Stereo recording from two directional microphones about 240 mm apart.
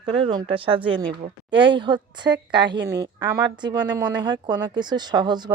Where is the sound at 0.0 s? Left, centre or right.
Right.